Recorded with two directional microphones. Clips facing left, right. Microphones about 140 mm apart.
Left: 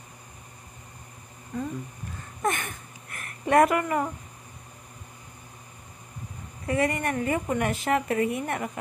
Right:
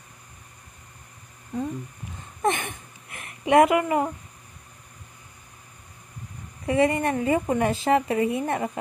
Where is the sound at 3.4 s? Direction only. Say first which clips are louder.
Right 3 dB; 20° right (ahead or behind).